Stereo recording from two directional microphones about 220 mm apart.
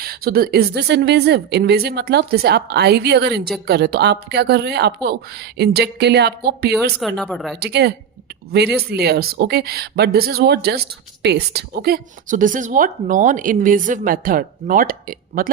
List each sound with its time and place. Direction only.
0.0 s speech: 45° right (ahead or behind)
7.2 s speech: centre (ahead or behind)
7.6 s speech: 50° right (ahead or behind)